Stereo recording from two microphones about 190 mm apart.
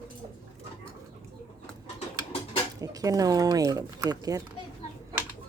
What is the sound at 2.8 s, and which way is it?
Speech, 20° right (ahead or behind).